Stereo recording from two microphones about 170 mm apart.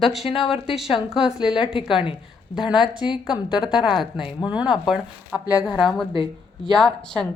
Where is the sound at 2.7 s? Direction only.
5° right (ahead or behind).